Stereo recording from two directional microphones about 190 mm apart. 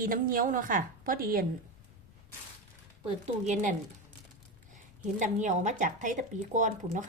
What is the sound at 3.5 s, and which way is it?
Speech, 40° right (ahead or behind).